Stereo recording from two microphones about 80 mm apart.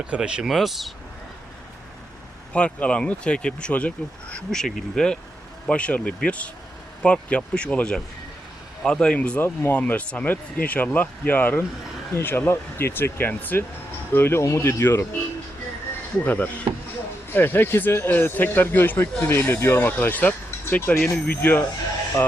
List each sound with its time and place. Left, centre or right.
0.0 s speech: centre
0.4 s speech: centre
2.5 s speech: centre
9.4 s speech: left
16.2 s speech: left